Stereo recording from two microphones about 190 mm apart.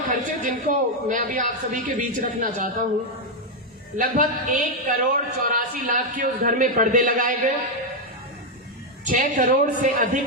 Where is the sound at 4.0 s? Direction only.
45° right (ahead or behind).